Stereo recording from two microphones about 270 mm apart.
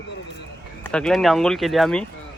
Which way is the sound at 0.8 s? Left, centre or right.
Centre.